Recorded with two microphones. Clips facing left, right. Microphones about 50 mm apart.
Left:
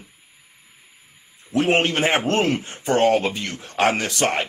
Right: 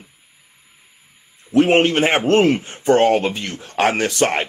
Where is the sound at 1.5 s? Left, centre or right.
Right.